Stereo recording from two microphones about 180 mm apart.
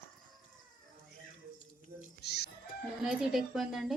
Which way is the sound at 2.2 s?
65° left (ahead or behind).